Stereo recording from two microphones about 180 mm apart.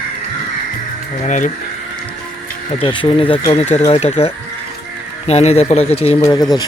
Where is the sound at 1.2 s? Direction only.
45° left (ahead or behind).